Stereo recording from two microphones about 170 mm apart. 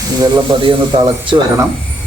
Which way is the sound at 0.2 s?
25° right (ahead or behind).